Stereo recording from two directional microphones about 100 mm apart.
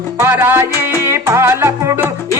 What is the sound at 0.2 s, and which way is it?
Music, 25° right (ahead or behind).